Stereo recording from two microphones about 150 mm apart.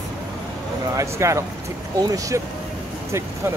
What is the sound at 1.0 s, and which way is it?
Speech, 20° right (ahead or behind).